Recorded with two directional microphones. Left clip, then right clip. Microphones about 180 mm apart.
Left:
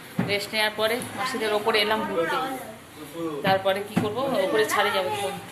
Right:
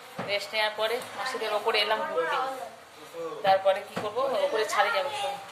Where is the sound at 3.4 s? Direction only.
Centre (ahead or behind).